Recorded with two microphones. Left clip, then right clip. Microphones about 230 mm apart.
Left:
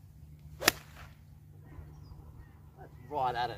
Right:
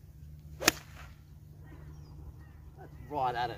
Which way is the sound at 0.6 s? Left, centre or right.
Centre.